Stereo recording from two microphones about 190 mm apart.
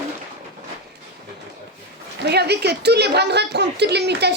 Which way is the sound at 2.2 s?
60° right (ahead or behind).